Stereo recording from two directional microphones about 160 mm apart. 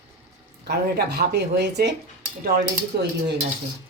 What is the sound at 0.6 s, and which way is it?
A woman's voice, 90° right.